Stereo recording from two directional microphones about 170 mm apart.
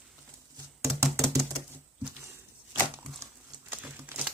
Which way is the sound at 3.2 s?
15° right (ahead or behind).